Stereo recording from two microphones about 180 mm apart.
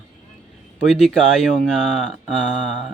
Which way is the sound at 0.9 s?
Centre (ahead or behind).